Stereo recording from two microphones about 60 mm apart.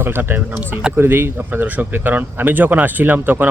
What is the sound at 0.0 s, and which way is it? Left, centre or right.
Speech, right.